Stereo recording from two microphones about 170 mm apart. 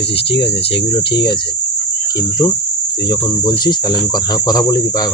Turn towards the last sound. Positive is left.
turn(degrees=20)  # may be behind; listen again after turning